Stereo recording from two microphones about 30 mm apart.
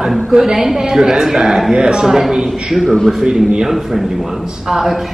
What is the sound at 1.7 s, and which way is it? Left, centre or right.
Speech, right.